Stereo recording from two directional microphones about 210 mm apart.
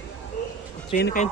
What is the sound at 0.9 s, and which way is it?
Speech, 40° left (ahead or behind).